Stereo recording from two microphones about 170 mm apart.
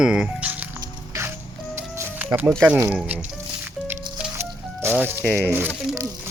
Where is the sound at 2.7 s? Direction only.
15° right (ahead or behind).